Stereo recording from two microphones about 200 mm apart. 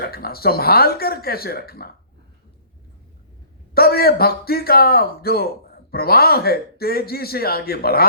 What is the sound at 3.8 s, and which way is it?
A man's voice, 50° left (ahead or behind).